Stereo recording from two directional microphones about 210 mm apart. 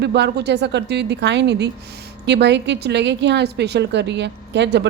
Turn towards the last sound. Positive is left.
turn(degrees=-55)  # may be behind; listen again after turning